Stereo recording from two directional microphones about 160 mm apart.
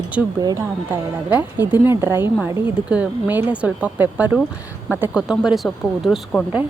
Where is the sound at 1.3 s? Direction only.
10° right (ahead or behind).